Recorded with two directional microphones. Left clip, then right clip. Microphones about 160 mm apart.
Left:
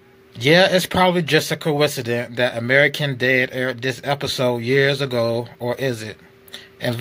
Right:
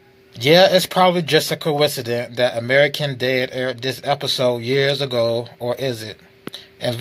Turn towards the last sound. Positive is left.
turn(degrees=15)  # may be behind; listen again after turning